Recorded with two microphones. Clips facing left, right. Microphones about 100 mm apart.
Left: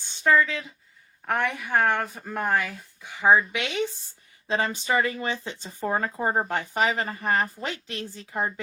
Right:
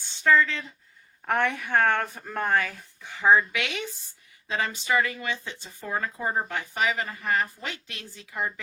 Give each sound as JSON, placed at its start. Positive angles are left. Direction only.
{"t": 0.1, "sound": "speech", "side_deg": 20}